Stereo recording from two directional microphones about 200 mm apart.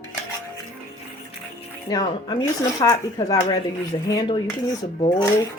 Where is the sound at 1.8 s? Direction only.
20° left (ahead or behind).